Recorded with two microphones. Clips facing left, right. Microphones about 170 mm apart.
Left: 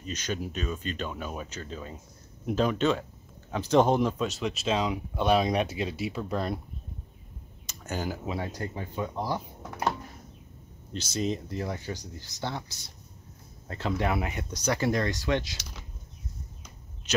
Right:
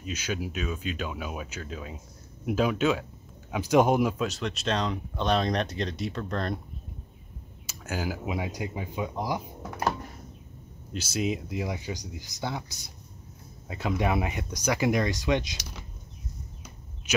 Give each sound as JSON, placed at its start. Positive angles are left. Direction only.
{"t": 0.0, "sound": "speech", "side_deg": -5}
{"t": 7.6, "sound": "speech", "side_deg": -5}
{"t": 10.9, "sound": "speech", "side_deg": -5}